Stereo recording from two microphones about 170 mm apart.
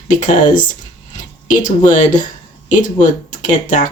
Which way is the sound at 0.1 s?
50° left (ahead or behind).